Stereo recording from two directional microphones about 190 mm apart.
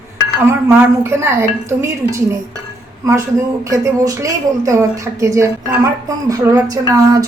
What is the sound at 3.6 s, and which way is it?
A woman's voice, 15° right (ahead or behind).